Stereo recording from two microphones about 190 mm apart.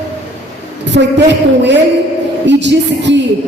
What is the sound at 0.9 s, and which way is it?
A woman's voice, 65° right (ahead or behind).